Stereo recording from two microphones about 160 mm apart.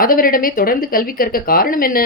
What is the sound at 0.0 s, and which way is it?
A woman's voice, 60° left (ahead or behind).